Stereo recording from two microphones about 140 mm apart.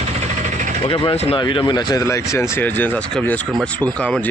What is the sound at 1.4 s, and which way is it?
Speech, 35° left (ahead or behind).